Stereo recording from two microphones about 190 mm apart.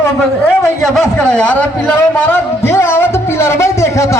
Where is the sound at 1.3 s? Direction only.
10° left (ahead or behind).